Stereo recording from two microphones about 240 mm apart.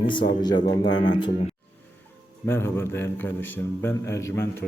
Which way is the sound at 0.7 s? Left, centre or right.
Centre.